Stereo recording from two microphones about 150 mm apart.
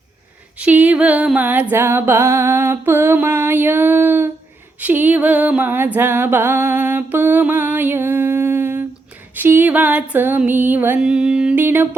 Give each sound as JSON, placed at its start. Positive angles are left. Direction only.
{"t": 0.6, "sound": "music", "side_deg": -10}